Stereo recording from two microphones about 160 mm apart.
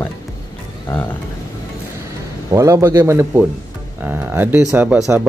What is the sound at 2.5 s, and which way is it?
Speech, 20° right (ahead or behind).